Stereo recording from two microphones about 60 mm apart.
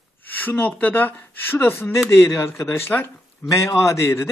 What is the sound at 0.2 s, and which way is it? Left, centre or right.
Speech, left.